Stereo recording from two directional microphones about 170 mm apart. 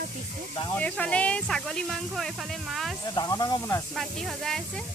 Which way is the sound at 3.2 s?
25° left (ahead or behind).